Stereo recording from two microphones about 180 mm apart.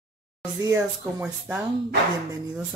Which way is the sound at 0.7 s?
10° right (ahead or behind).